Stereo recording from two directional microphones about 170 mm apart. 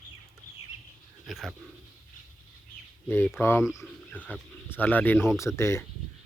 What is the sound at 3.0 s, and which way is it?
Speech, 15° left (ahead or behind).